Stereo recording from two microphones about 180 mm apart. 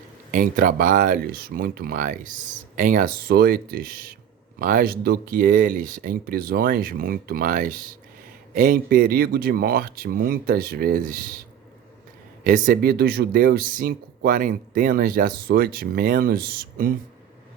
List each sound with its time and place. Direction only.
0.3 s speech: 50° right (ahead or behind)
12.5 s speech: 50° right (ahead or behind)